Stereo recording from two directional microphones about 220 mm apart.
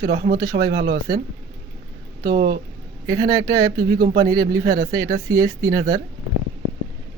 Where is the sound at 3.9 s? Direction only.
40° right (ahead or behind).